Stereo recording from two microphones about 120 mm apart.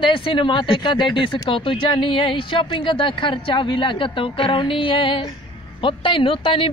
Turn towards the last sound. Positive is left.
turn(degrees=50)  # may be behind; listen again after turning